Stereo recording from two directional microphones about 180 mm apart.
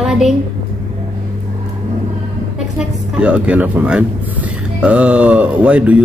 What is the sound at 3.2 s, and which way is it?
Speech, 5° right (ahead or behind).